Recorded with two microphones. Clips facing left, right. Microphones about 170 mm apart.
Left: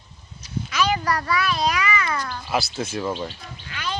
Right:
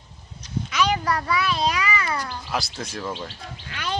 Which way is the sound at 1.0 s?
5° right (ahead or behind).